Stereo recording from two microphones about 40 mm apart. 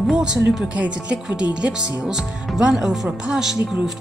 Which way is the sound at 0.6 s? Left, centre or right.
Right.